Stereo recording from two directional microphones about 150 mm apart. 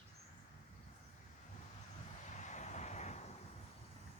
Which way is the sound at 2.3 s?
55° left (ahead or behind).